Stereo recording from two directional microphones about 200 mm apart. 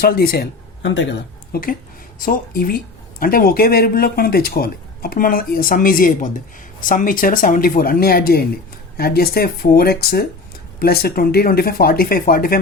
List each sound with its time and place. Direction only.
0.0 s speech: 50° left (ahead or behind); by 1.1 s 65° left (ahead or behind)
1.5 s speech: 50° left (ahead or behind)